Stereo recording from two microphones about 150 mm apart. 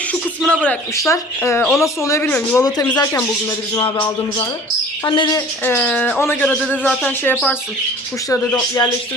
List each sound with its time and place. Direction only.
0.1 s speech: 10° left (ahead or behind)
0.9 s speech: 20° left (ahead or behind)
2.2 s speech: 10° left (ahead or behind)
2.6 s speech: 25° left (ahead or behind)
3.0 s speech: 15° left (ahead or behind)
5.0 s speech: 30° left (ahead or behind)
5.6 s speech: 10° left (ahead or behind)
8.3 s speech: 20° left (ahead or behind)